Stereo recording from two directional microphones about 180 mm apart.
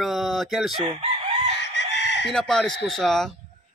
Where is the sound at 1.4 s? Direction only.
70° left (ahead or behind).